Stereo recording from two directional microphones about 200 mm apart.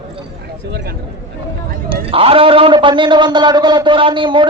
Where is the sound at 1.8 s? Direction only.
25° right (ahead or behind).